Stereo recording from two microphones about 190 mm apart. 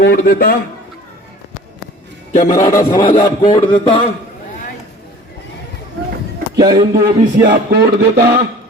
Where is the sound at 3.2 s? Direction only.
25° left (ahead or behind).